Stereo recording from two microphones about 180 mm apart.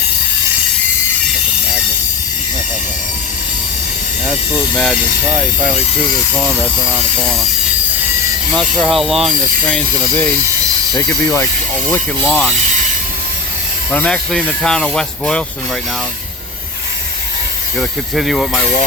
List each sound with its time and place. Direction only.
6.3 s speech: 10° right (ahead or behind)
7.2 s pulleys: 5° left (ahead or behind)
8.5 s pulleys: centre (ahead or behind)
10.9 s speech: 20° left (ahead or behind)
13.9 s pulleys: 5° left (ahead or behind)
17.7 s pulleys: centre (ahead or behind)